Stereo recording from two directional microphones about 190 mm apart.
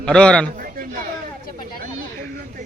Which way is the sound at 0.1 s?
5° left (ahead or behind).